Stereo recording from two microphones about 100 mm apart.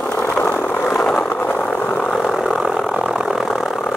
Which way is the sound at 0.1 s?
20° left (ahead or behind).